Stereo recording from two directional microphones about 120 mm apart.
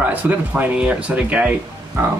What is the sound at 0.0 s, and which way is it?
Speech, 15° right (ahead or behind).